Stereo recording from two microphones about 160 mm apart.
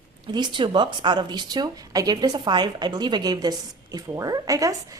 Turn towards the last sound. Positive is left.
turn(degrees=-20)  # may be behind; listen again after turning